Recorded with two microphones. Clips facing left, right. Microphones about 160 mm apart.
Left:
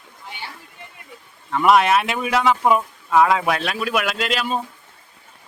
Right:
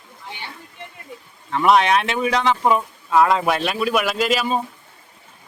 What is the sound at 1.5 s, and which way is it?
Speech, 5° left (ahead or behind).